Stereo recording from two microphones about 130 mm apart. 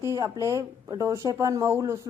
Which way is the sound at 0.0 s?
25° right (ahead or behind).